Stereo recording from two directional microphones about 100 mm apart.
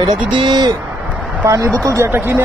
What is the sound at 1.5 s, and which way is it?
Speech, 30° right (ahead or behind).